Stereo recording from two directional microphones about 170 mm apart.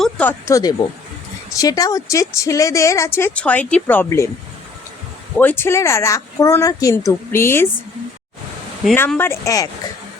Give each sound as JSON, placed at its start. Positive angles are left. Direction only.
{"t": 0.0, "sound": "a woman's voice", "side_deg": 10}
{"t": 5.4, "sound": "a woman's voice", "side_deg": 10}
{"t": 9.0, "sound": "a woman's voice", "side_deg": 10}